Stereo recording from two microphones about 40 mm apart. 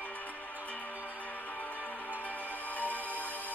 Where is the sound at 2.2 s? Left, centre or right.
Left.